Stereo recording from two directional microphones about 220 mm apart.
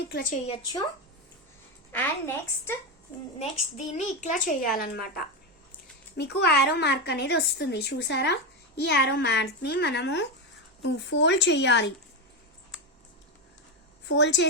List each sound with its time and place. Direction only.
0.1 s a child's voice: 40° left (ahead or behind)
0.4 s a woman's voice: 25° left (ahead or behind)
1.9 s a woman's voice: 10° left (ahead or behind)
3.8 s a child's voice: 30° left (ahead or behind); by 11.9 s 50° left (ahead or behind)
14.1 s a woman's voice: 55° left (ahead or behind)